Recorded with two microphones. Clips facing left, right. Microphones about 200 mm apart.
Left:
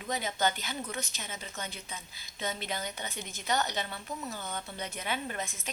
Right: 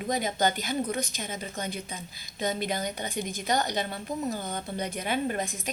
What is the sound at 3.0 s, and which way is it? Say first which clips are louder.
Speech: right 5 dB; 15° right (ahead or behind).